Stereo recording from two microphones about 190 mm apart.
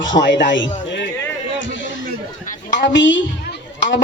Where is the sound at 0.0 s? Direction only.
75° left (ahead or behind).